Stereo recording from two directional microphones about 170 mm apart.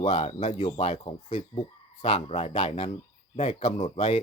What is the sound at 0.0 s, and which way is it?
Speech, 35° left (ahead or behind).